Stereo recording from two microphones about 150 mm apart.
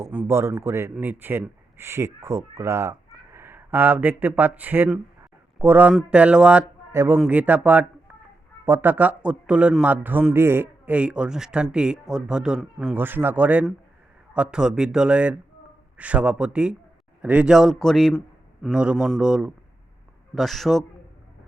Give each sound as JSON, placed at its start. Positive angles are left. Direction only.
{"t": 0.1, "sound": "a man's voice", "side_deg": -15}